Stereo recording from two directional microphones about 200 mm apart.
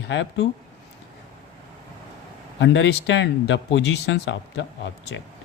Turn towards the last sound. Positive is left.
turn(degrees=65)  # may be behind; listen again after turning